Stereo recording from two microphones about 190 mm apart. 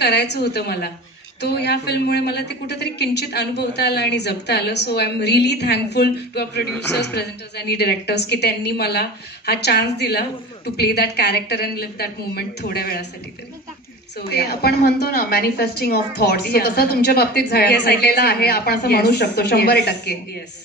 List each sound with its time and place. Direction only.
0.0 s a woman's voice: 60° left (ahead or behind)
14.1 s a woman's voice: 60° left (ahead or behind)